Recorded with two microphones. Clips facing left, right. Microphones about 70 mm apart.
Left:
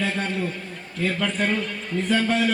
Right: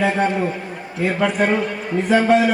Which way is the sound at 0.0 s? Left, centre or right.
Centre.